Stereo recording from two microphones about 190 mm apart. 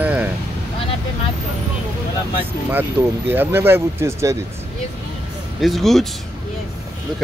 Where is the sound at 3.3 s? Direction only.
10° right (ahead or behind).